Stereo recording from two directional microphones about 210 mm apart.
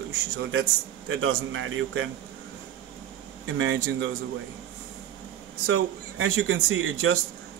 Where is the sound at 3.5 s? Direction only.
70° right (ahead or behind).